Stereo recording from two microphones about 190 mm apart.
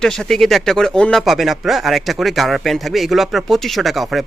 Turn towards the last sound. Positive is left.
turn(degrees=0)  # may be behind; listen again after turning